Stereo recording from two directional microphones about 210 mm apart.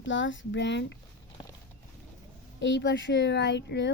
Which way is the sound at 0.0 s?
60° left (ahead or behind).